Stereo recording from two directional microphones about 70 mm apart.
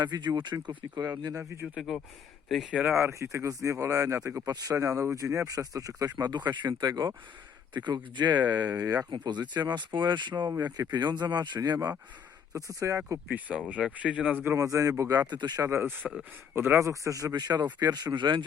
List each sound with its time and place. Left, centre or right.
0.0 s speech: right
1.2 s speech: right
1.6 s speech: centre
3.0 s speech: right
8.7 s speech: right
9.0 s speech: right
12.5 s speech: right
13.2 s speech: centre
14.5 s speech: right
15.6 s speech: right
17.3 s speech: right